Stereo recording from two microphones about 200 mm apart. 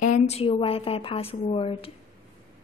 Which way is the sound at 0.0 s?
35° left (ahead or behind).